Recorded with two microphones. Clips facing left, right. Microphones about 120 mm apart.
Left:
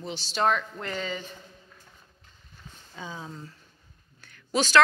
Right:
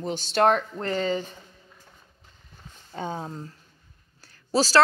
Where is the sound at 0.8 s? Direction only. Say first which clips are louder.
Right 7 dB; 40° right (ahead or behind).